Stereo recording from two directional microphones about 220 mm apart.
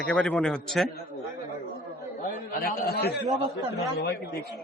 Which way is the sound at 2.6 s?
45° left (ahead or behind).